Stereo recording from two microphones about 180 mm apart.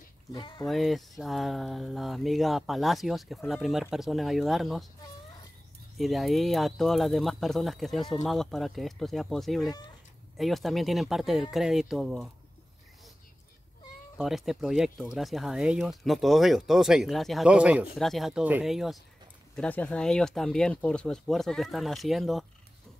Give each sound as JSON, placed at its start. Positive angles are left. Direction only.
{"t": 0.3, "sound": "speech", "side_deg": 25}
{"t": 0.7, "sound": "speech", "side_deg": 0}
{"t": 5.9, "sound": "speech", "side_deg": 0}
{"t": 14.1, "sound": "speech", "side_deg": 0}